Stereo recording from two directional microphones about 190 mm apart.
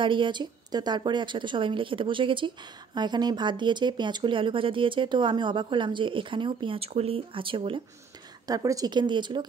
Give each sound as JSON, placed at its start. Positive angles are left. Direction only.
{"t": 0.0, "sound": "a woman's voice", "side_deg": -25}